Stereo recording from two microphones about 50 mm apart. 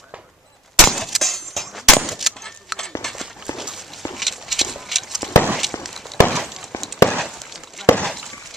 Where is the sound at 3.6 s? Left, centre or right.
Centre.